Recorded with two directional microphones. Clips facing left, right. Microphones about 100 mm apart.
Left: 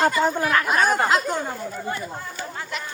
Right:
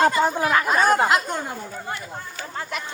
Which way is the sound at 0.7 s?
Centre (ahead or behind).